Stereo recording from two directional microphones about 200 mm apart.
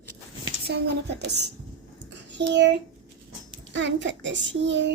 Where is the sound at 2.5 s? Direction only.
60° right (ahead or behind).